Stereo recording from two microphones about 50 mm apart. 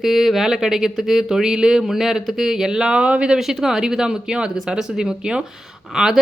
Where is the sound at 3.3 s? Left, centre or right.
Centre.